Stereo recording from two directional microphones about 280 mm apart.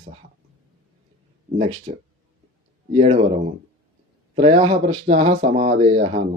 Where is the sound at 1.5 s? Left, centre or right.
Right.